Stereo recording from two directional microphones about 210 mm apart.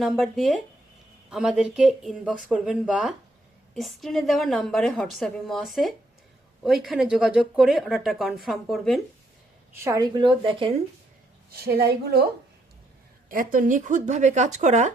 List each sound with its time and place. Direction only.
0.0 s speech: centre (ahead or behind)
9.8 s speech: 15° right (ahead or behind)
11.5 s a woman's voice: 50° right (ahead or behind)
13.2 s speech: 40° right (ahead or behind)